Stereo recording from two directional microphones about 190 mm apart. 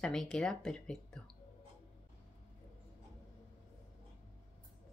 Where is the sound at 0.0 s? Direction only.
5° left (ahead or behind).